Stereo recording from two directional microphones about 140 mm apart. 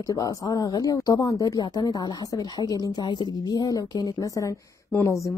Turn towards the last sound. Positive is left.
turn(degrees=20)  # may be behind; listen again after turning